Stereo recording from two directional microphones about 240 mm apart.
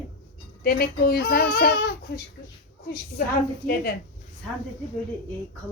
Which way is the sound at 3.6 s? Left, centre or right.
Left.